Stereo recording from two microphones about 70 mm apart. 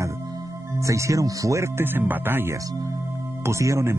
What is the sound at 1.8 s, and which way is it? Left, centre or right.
Speech, right.